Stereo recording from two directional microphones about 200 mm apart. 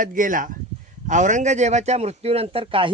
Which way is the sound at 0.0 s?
40° right (ahead or behind).